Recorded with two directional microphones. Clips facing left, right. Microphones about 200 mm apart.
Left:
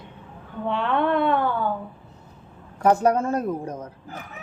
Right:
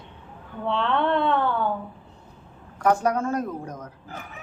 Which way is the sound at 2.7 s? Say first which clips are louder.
Left 3 dB; 30° left (ahead or behind).